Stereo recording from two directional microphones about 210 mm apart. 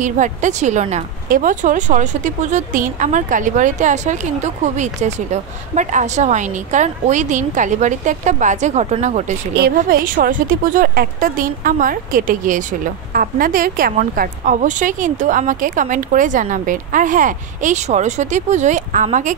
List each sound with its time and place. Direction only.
0.0 s speech: 35° right (ahead or behind)
9.6 s speech: 45° right (ahead or behind)